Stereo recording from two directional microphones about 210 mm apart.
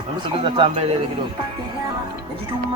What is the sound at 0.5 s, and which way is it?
Speech, 20° right (ahead or behind).